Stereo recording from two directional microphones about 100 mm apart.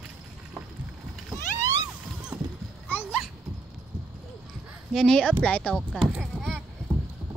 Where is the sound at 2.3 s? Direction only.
5° right (ahead or behind).